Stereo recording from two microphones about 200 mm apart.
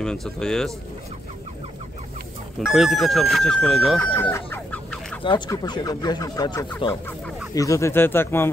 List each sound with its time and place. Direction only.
0.0 s speech: 5° left (ahead or behind)
2.6 s speech: centre (ahead or behind)
4.0 s chicken: 10° left (ahead or behind)
5.2 s speech: 20° left (ahead or behind)